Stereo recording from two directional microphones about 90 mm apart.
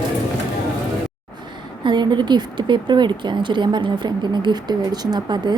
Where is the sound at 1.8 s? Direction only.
60° right (ahead or behind).